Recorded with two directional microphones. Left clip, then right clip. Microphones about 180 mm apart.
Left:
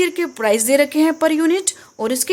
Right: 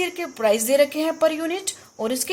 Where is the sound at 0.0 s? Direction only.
30° left (ahead or behind).